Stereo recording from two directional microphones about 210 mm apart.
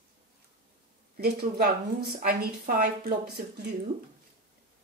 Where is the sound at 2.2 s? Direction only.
45° right (ahead or behind).